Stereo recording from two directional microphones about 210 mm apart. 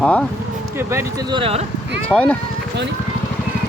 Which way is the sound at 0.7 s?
15° right (ahead or behind).